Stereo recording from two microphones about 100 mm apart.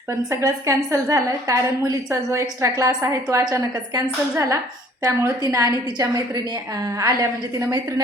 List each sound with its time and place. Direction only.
0.3 s a woman's voice: 30° right (ahead or behind)